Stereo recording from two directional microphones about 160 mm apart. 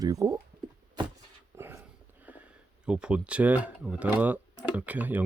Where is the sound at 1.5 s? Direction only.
15° right (ahead or behind).